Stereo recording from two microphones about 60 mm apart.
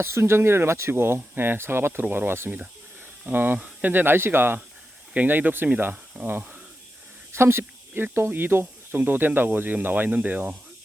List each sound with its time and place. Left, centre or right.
0.0 s speech: right
3.6 s speech: right
3.9 s speech: right
7.3 s speech: right